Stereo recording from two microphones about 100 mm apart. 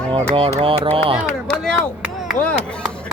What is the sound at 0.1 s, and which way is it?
Speech, 65° right (ahead or behind).